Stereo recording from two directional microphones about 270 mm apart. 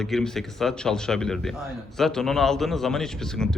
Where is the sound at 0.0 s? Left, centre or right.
Centre.